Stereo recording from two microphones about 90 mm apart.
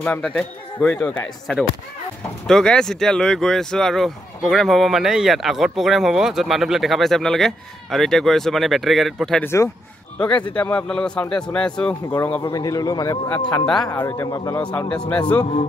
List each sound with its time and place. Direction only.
0.2 s a man's voice: 10° left (ahead or behind)
0.7 s speech: 20° left (ahead or behind)
2.4 s speech: 5° left (ahead or behind)
9.4 s speech: 30° left (ahead or behind)
10.1 s a man's voice: 10° left (ahead or behind)
12.1 s speech: 20° left (ahead or behind)
12.5 s speech: 45° left (ahead or behind)
13.9 s a man's voice: 30° left (ahead or behind)
14.9 s a man's voice: 15° left (ahead or behind)